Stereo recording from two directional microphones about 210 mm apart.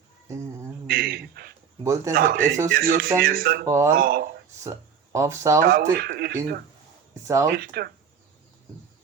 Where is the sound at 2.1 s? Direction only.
45° right (ahead or behind).